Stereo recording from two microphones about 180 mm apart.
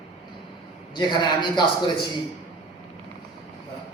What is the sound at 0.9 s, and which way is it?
A man's voice, 25° left (ahead or behind).